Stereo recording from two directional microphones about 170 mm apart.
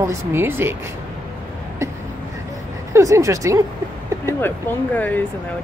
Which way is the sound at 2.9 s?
15° right (ahead or behind).